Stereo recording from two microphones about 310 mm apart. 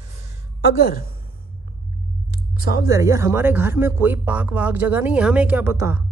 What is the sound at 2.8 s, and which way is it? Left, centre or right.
Speech, centre.